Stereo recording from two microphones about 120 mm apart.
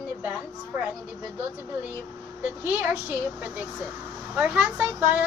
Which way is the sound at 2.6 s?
15° right (ahead or behind).